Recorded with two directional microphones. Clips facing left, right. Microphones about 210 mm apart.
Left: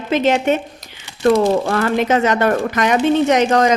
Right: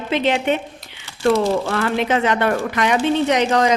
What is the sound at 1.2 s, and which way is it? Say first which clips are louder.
Speech: left 3 dB; 55° left (ahead or behind).